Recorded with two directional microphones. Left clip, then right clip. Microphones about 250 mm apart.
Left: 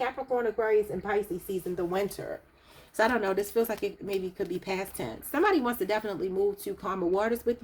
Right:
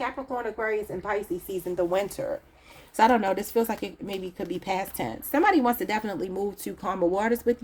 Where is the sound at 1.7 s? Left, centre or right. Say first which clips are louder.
Right 6 dB; right.